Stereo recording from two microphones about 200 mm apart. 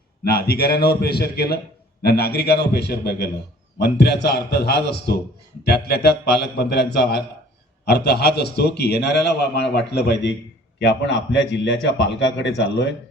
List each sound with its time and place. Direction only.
0.3 s a man's voice: 50° left (ahead or behind)